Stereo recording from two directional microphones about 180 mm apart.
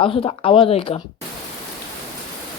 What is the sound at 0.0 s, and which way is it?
Speech, 30° left (ahead or behind).